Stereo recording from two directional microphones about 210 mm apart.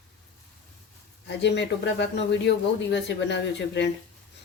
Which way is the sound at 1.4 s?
55° left (ahead or behind).